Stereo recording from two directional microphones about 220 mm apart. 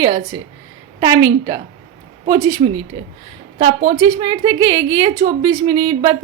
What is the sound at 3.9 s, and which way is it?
A woman's voice, 20° right (ahead or behind).